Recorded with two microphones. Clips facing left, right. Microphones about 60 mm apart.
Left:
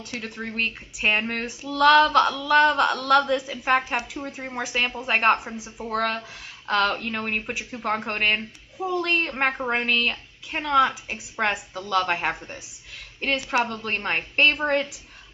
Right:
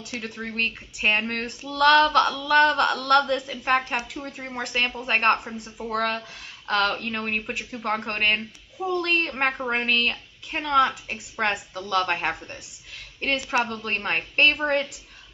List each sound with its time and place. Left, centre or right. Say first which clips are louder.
0.0 s a woman's voice: even; centre